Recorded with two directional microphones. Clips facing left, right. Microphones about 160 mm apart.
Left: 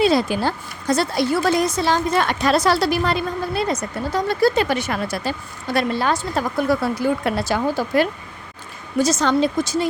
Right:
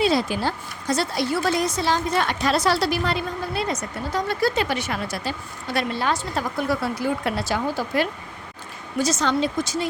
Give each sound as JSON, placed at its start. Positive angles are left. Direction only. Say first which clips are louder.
{"t": 0.0, "sound": "a woman's voice", "louder": "left 4 dB", "side_deg": 50}
{"t": 4.5, "sound": "a woman's voice", "louder": "left 4 dB", "side_deg": 45}